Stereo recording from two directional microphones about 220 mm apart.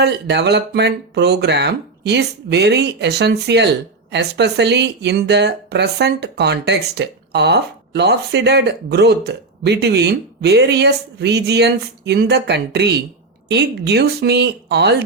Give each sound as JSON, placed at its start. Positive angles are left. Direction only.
{"t": 0.0, "sound": "speech", "side_deg": -50}